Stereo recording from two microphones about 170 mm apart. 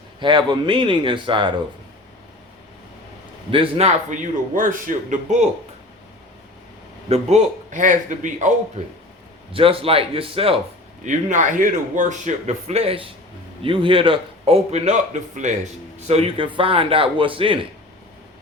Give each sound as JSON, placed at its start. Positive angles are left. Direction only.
{"t": 0.2, "sound": "speech", "side_deg": -25}
{"t": 3.5, "sound": "a man's voice", "side_deg": -35}
{"t": 7.1, "sound": "a man's voice", "side_deg": -40}
{"t": 9.5, "sound": "a man's voice", "side_deg": -30}
{"t": 11.0, "sound": "a man's voice", "side_deg": -45}
{"t": 16.0, "sound": "a man's voice", "side_deg": -35}